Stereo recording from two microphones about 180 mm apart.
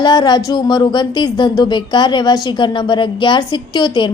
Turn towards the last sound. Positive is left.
turn(degrees=25)  # may be behind; listen again after turning